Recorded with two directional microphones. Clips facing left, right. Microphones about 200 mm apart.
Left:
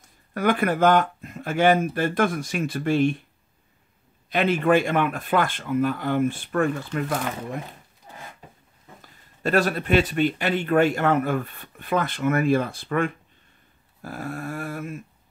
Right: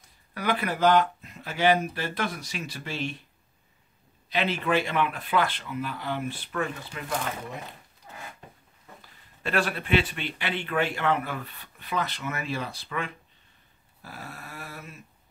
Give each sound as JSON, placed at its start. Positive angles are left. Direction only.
{"t": 0.3, "sound": "a man's voice", "side_deg": 50}
{"t": 4.3, "sound": "a man's voice", "side_deg": 50}
{"t": 8.1, "sound": "a sound", "side_deg": 15}
{"t": 9.4, "sound": "a man's voice", "side_deg": 40}